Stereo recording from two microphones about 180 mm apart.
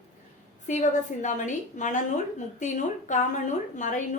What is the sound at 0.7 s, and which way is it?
A woman's voice, 45° left (ahead or behind).